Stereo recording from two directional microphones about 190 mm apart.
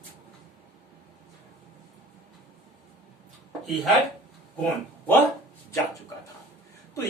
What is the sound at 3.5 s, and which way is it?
Speech, centre (ahead or behind).